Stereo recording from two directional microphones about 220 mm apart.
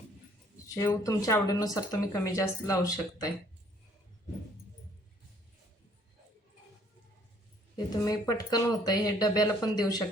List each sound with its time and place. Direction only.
0.7 s speech: 15° left (ahead or behind)
8.0 s speech: 15° left (ahead or behind)